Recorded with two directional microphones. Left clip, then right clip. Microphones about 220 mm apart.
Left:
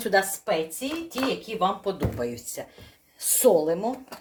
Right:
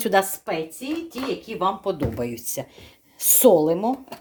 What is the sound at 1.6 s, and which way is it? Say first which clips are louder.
Speech: right 3 dB; 45° right (ahead or behind).